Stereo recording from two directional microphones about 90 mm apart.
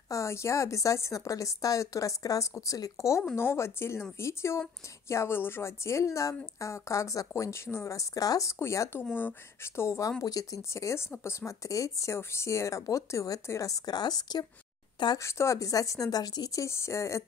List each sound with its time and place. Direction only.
0.1 s speech: 35° left (ahead or behind); by 14.4 s 50° left (ahead or behind)
15.1 s speech: 35° left (ahead or behind)